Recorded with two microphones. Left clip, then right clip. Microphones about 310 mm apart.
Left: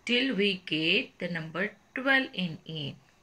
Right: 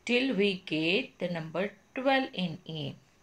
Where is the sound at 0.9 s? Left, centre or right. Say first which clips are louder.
Left 2 dB; centre.